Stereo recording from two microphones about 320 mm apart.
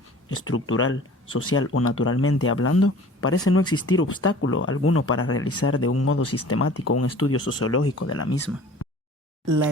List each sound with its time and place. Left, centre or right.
0.3 s speech: left